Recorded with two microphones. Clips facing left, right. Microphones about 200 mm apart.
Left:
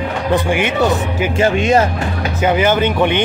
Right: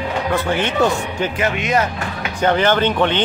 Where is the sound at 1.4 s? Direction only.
30° left (ahead or behind).